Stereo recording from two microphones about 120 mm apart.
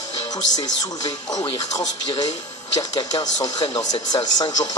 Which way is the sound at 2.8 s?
35° left (ahead or behind).